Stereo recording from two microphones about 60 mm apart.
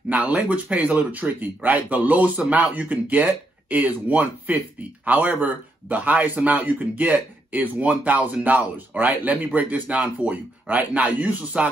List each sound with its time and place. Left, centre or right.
0.1 s speech: right